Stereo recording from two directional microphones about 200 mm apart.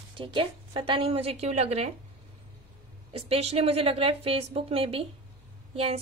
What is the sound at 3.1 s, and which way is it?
A woman's voice, 30° right (ahead or behind).